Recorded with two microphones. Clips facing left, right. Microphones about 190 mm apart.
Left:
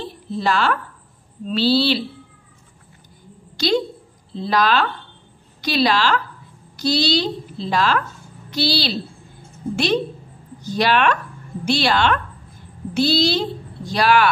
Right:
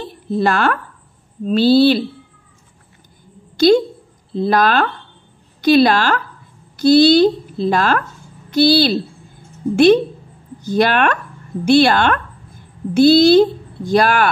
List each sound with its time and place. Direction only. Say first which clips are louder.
0.3 s a woman's voice: right 4 dB; 55° right (ahead or behind)
3.5 s a woman's voice: right 8 dB; 50° right (ahead or behind)
10.6 s a woman's voice: right 3 dB; 55° right (ahead or behind)